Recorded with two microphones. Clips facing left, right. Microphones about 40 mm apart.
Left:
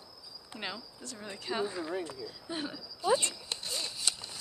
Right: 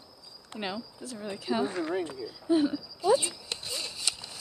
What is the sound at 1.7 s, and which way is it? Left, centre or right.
Speech, right.